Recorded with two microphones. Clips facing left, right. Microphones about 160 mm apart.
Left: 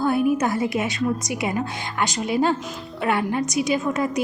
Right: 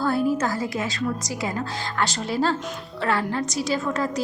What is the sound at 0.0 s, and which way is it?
A woman's voice, 20° left (ahead or behind).